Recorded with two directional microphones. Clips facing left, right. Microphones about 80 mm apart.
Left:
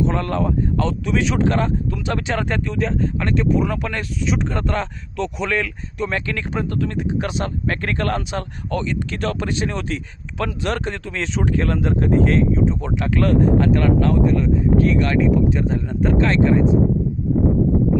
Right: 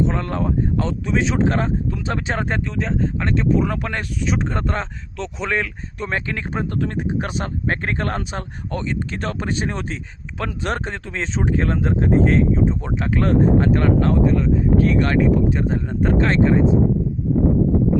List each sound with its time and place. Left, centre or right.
0.0 s speech: right